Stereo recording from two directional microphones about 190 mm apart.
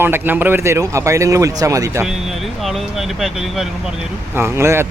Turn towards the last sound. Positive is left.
turn(degrees=-15)  # may be behind; listen again after turning